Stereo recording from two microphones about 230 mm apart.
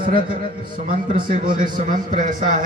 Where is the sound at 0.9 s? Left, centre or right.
Right.